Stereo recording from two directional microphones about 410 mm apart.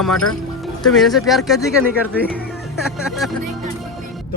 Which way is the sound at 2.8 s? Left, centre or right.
Centre.